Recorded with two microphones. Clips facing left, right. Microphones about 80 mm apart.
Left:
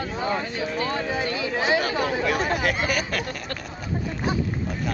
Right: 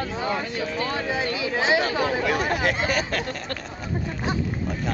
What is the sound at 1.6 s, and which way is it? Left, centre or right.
Speech, right.